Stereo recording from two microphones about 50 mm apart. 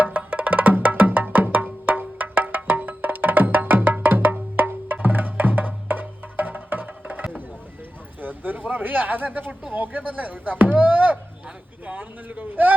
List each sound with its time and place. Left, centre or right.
0.0 s wood block: right
3.9 s music: right
8.2 s speech: right